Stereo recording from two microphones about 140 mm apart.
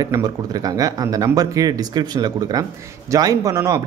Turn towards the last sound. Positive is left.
turn(degrees=-25)  # may be behind; listen again after turning